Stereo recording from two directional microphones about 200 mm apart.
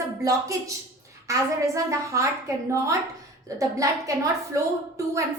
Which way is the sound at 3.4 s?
15° right (ahead or behind).